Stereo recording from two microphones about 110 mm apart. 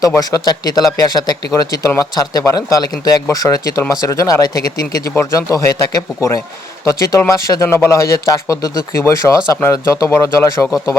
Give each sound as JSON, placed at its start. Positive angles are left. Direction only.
{"t": 0.2, "sound": "speech", "side_deg": 35}